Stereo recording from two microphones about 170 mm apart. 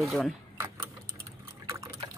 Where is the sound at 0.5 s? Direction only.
20° right (ahead or behind).